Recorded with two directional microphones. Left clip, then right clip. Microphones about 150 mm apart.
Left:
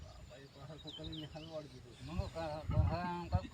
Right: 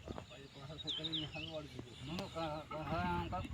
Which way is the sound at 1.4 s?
30° left (ahead or behind).